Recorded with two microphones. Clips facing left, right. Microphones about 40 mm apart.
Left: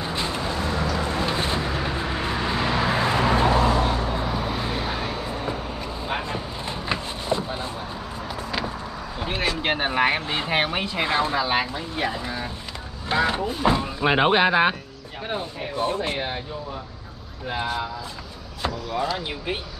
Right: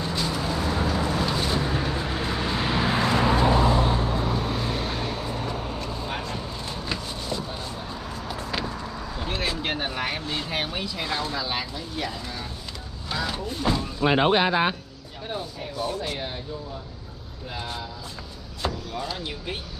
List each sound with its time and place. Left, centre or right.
0.0 s vehicle: left
0.3 s vehicle: left; by 2.6 s centre
2.6 s vehicle: centre
3.3 s vehicle: left
4.1 s vehicle: centre
8.3 s vehicle: centre
9.2 s a sound: centre
9.6 s speech: left
13.5 s speech: left
15.2 s speech: left
19.1 s speech: left